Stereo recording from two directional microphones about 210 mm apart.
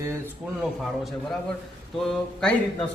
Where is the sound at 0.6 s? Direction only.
Centre (ahead or behind).